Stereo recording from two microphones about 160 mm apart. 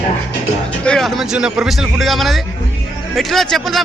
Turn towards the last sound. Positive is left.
turn(degrees=0)  # may be behind; listen again after turning